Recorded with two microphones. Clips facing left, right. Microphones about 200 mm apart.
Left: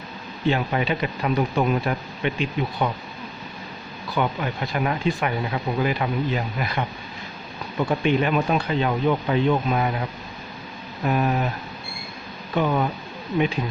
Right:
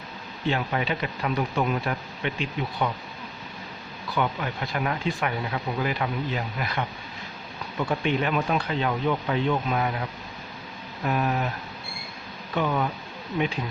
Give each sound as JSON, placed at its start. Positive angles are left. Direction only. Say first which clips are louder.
{"t": 0.4, "sound": "speech", "louder": "left 4 dB", "side_deg": 10}
{"t": 4.2, "sound": "speech", "louder": "left 3 dB", "side_deg": 15}
{"t": 12.5, "sound": "speech", "louder": "left 3 dB", "side_deg": 15}